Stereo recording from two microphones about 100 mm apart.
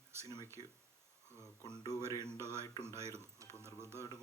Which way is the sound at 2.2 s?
25° right (ahead or behind).